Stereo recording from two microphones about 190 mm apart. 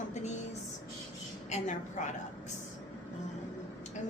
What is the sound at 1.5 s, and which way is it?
Speech, 35° left (ahead or behind).